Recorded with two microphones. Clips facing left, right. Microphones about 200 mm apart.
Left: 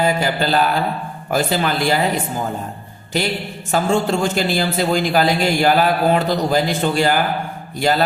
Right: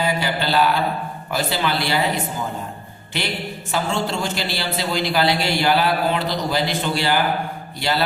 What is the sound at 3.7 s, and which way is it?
A man's voice, 45° left (ahead or behind).